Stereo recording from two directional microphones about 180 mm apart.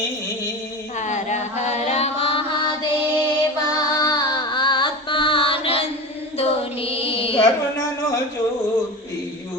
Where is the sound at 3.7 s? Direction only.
20° left (ahead or behind).